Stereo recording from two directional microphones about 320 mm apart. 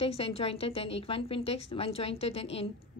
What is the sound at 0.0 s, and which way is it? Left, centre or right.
A woman's voice, centre.